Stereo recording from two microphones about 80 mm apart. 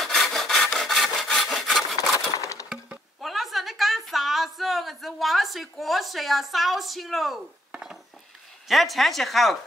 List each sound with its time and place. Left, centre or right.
0.0 s rub: centre
2.1 s coin: left
3.2 s a sound: centre
8.6 s speech: centre